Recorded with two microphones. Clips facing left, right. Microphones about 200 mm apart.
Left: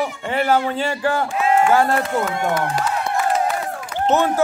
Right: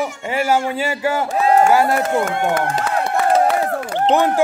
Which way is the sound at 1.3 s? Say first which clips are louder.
Right 5 dB; 40° right (ahead or behind).